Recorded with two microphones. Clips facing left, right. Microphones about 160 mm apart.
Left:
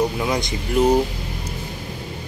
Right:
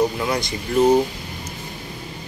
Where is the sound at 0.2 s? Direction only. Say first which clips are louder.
Left 1 dB; 15° left (ahead or behind).